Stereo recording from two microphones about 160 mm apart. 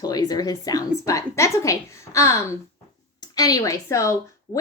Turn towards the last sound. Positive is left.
turn(degrees=20)  # may be behind; listen again after turning